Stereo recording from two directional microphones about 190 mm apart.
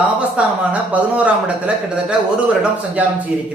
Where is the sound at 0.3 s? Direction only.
5° right (ahead or behind).